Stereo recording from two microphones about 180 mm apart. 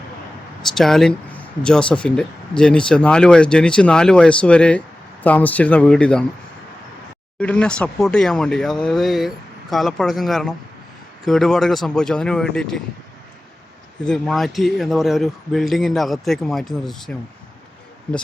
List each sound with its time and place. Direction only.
0.7 s speech: centre (ahead or behind)
7.3 s speech: 5° left (ahead or behind)
14.0 s speech: centre (ahead or behind)